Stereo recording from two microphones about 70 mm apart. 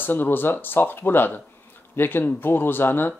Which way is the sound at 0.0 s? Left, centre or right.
Left.